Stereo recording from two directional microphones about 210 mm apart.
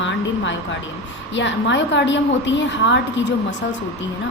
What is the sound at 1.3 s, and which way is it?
A woman's voice, 60° left (ahead or behind).